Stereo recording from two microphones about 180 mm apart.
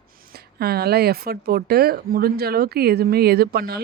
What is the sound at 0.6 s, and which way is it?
Speech, 60° right (ahead or behind).